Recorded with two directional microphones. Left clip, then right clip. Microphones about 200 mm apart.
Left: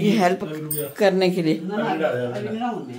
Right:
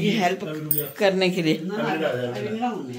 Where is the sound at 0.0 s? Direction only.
35° left (ahead or behind).